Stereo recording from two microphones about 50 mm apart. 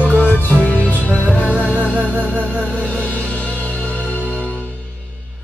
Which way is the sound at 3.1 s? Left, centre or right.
Left.